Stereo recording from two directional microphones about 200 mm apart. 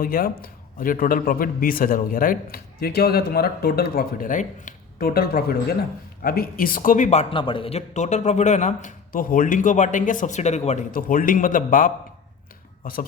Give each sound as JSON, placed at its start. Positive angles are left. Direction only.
{"t": 0.0, "sound": "a man's voice", "side_deg": 45}